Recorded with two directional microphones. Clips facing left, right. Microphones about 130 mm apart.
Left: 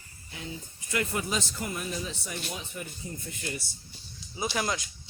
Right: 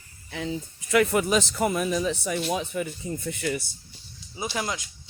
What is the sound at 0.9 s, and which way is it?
A man's voice, 85° right.